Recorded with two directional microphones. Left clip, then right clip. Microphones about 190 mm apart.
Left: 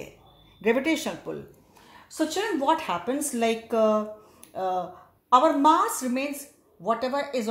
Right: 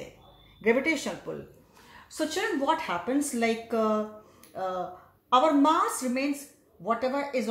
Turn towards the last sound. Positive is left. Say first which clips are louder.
# left 1 dB
turn(degrees=35)  # may be behind; listen again after turning